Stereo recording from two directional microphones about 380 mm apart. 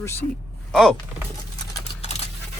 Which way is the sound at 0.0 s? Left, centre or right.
Centre.